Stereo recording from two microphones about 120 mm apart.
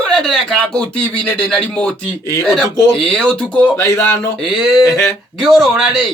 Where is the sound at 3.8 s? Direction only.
25° left (ahead or behind).